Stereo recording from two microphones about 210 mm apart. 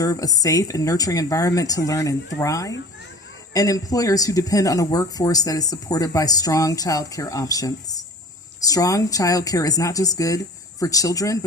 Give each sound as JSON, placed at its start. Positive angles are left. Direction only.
{"t": 0.0, "sound": "speech", "side_deg": 15}